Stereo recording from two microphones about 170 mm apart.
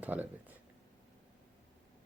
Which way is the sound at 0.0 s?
10° right (ahead or behind).